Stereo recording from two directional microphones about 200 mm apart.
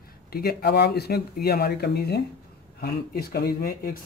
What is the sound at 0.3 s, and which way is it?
Speech, 50° left (ahead or behind).